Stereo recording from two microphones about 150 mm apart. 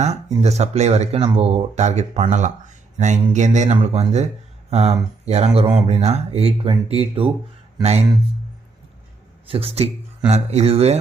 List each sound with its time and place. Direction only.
0.0 s speech: 50° right (ahead or behind)
9.5 s speech: 40° right (ahead or behind)